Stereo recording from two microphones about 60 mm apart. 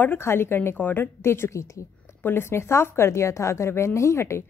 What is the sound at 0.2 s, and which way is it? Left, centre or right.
Speech, left.